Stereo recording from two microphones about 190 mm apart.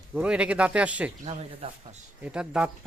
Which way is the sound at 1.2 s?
35° right (ahead or behind).